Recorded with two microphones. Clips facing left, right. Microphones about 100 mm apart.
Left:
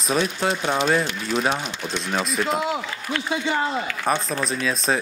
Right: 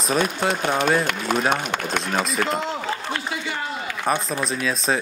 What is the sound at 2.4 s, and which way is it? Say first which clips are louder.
Speech: left 2 dB; 5° left (ahead or behind).